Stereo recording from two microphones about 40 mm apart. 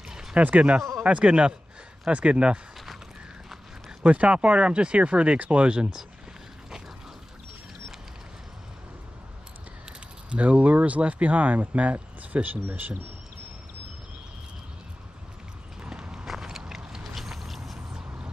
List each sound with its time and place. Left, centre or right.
0.1 s a sound: centre
0.4 s speech: right
4.0 s speech: right
10.3 s speech: right
15.8 s clip-clop: right
16.3 s a sound: centre